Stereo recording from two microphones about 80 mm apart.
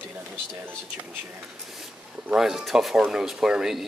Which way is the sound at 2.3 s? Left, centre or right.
Centre.